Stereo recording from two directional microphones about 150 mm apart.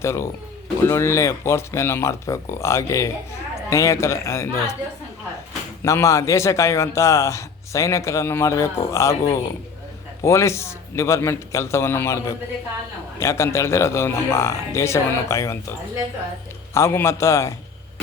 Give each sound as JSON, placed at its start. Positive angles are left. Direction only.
{"t": 0.0, "sound": "a man's voice", "side_deg": 20}
{"t": 5.8, "sound": "a man's voice", "side_deg": 20}
{"t": 16.7, "sound": "a man's voice", "side_deg": 15}